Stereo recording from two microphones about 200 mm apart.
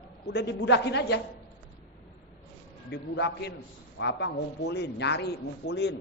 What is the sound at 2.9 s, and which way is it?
A man's voice, 60° left (ahead or behind).